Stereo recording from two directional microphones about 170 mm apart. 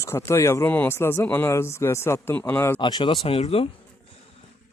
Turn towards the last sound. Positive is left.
turn(degrees=35)  # may be behind; listen again after turning